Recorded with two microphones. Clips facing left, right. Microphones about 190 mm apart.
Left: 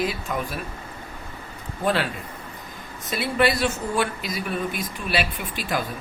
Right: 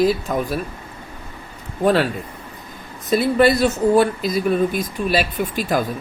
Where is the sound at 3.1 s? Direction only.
40° right (ahead or behind).